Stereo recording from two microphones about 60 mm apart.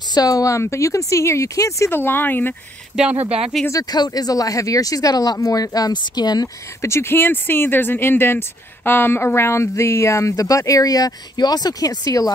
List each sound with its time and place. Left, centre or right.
0.2 s speech: left
1.9 s speech: left
2.9 s speech: centre
3.7 s speech: left
6.9 s speech: left